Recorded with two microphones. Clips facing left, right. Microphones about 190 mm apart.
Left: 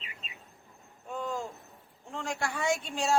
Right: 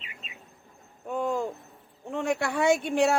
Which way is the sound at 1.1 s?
55° right (ahead or behind).